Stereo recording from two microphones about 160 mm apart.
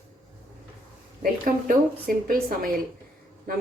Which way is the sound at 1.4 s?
55° right (ahead or behind).